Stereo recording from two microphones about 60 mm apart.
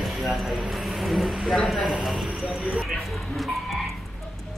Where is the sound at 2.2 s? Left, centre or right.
Centre.